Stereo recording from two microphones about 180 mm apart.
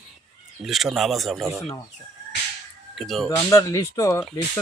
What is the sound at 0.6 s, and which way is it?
Speech, centre (ahead or behind).